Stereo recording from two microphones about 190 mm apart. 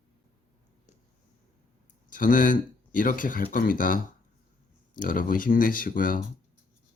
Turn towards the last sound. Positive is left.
turn(degrees=45)  # may be behind; listen again after turning